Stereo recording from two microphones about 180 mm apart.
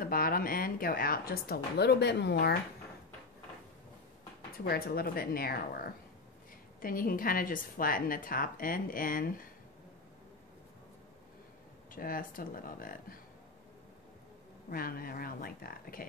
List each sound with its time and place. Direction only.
0.0 s a woman's voice: 55° left (ahead or behind)
4.6 s a woman's voice: 60° left (ahead or behind)
11.9 s a woman's voice: 50° left (ahead or behind)
14.7 s a woman's voice: 55° left (ahead or behind)